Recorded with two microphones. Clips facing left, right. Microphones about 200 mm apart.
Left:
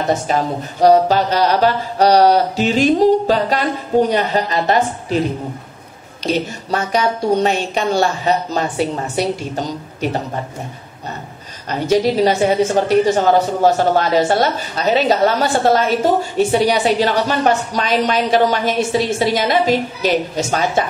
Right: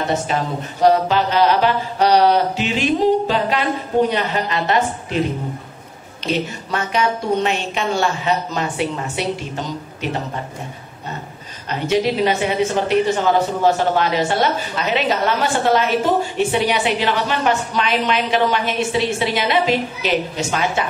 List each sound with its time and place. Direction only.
0.3 s a woman's voice: 40° left (ahead or behind)
6.2 s a woman's voice: 40° left (ahead or behind)
11.9 s a woman's voice: 40° left (ahead or behind)